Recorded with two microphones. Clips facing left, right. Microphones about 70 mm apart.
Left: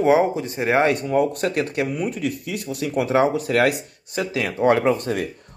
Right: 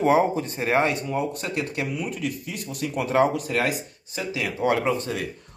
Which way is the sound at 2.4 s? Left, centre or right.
Right.